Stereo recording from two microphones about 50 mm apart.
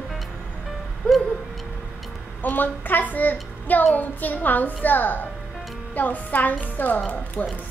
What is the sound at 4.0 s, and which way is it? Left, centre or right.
Music, left.